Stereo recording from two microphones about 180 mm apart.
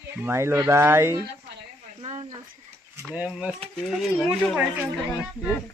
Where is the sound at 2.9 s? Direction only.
10° right (ahead or behind).